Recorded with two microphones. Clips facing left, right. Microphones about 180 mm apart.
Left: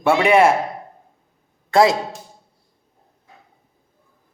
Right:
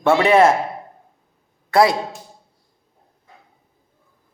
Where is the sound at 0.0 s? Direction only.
15° left (ahead or behind).